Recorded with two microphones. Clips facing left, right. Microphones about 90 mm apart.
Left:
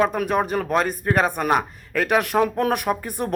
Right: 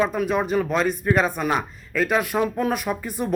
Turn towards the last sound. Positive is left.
turn(degrees=55)  # may be behind; listen again after turning